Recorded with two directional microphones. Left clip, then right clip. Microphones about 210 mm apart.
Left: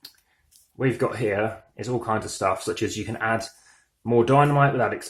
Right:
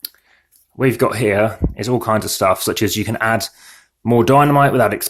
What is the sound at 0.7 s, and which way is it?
Speech, 40° right (ahead or behind).